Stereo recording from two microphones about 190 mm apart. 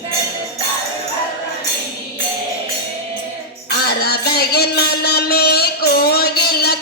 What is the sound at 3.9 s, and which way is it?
Music, 55° left (ahead or behind).